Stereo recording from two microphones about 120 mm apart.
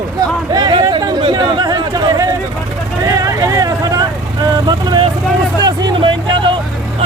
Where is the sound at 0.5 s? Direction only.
35° right (ahead or behind).